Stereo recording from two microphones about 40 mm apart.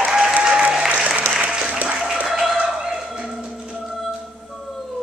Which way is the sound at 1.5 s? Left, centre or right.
Centre.